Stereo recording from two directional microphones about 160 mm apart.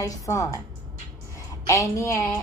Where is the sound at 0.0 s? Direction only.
20° left (ahead or behind).